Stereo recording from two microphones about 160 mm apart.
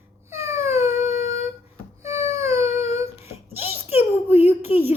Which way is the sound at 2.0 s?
15° right (ahead or behind).